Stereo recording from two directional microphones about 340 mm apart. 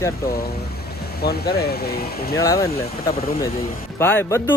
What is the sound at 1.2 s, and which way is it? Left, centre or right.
Speech, left.